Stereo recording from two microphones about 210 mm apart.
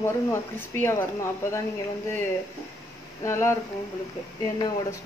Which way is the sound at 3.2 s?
15° left (ahead or behind).